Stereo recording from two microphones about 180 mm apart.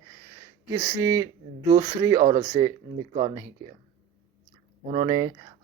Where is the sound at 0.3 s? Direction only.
25° right (ahead or behind).